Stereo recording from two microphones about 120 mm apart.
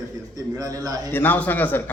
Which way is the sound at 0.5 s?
30° right (ahead or behind).